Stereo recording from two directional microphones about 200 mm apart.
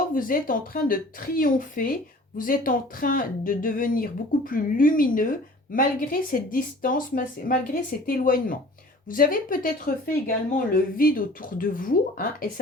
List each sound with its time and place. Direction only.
0.1 s a woman's voice: 45° left (ahead or behind)